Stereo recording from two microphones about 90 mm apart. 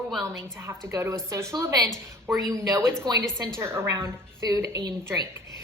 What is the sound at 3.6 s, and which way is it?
A woman's voice, 30° right (ahead or behind).